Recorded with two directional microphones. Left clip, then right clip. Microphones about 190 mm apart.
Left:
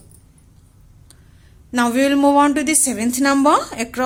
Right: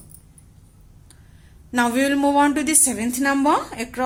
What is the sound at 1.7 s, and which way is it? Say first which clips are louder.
A woman's voice: left 3 dB; 15° left (ahead or behind).